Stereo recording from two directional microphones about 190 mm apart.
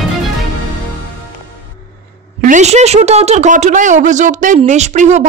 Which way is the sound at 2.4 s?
40° right (ahead or behind).